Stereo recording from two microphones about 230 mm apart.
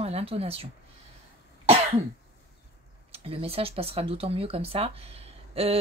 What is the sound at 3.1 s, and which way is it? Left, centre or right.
Speech, right.